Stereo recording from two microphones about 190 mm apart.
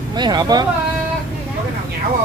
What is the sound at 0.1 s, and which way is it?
Speech, 20° right (ahead or behind).